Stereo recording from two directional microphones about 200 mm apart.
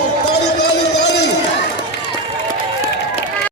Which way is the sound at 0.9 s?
60° left (ahead or behind).